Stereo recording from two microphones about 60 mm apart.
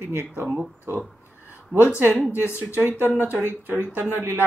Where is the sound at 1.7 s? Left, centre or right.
Right.